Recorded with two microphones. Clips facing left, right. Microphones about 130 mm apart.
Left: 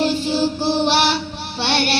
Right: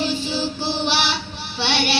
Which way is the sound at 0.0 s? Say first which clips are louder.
Left 5 dB; 55° left (ahead or behind).